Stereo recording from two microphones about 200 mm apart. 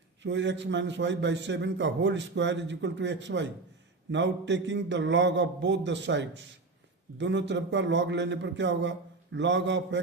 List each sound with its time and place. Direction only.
0.2 s a man's voice: 65° right (ahead or behind)